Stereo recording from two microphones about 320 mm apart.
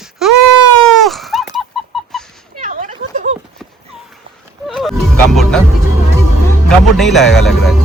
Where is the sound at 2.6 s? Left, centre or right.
Right.